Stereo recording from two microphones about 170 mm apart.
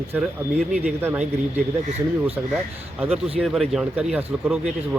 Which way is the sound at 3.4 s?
Centre (ahead or behind).